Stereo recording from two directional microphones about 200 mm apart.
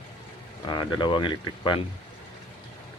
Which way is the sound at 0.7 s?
25° left (ahead or behind).